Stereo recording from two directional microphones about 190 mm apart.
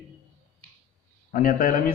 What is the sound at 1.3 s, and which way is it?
Speech, 45° left (ahead or behind).